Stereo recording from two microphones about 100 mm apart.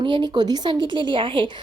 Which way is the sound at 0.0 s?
50° right (ahead or behind).